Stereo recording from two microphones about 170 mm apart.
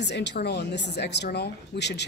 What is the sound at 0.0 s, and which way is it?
A woman's voice, 90° left.